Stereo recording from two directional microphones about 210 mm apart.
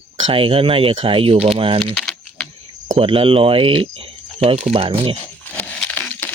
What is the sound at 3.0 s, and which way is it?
Speech, 25° right (ahead or behind).